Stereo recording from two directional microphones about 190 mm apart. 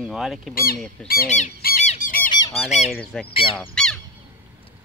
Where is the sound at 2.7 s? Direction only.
35° left (ahead or behind).